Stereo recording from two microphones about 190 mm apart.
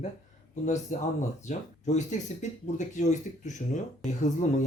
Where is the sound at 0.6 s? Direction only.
40° left (ahead or behind).